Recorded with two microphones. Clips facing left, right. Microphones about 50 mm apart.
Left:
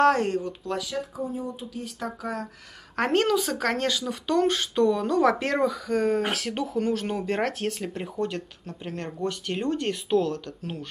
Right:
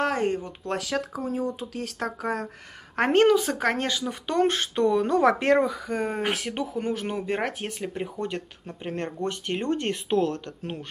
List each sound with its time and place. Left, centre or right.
0.0 s speech: centre
0.7 s speech: right
3.0 s speech: right